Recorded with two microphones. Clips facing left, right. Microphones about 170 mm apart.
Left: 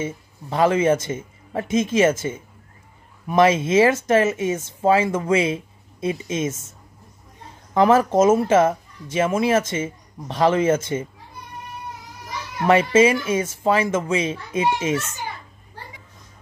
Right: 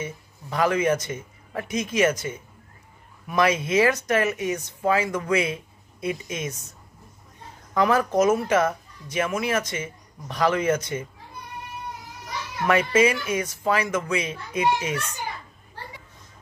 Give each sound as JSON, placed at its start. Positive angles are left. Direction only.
{"t": 0.0, "sound": "speech", "side_deg": 25}
{"t": 7.7, "sound": "speech", "side_deg": 25}
{"t": 12.6, "sound": "speech", "side_deg": 25}